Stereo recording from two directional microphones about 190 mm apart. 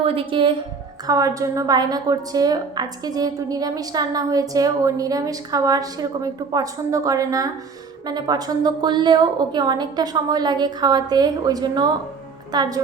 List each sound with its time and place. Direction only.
0.0 s a woman's voice: 30° right (ahead or behind)